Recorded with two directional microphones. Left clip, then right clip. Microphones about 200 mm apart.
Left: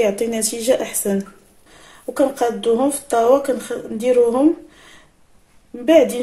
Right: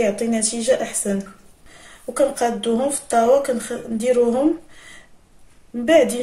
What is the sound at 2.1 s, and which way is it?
Speech, 15° left (ahead or behind).